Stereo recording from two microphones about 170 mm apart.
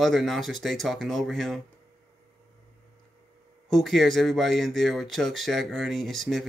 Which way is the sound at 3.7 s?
Centre (ahead or behind).